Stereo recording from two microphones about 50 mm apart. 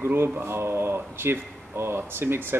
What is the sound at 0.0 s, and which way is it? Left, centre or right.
Speech, right.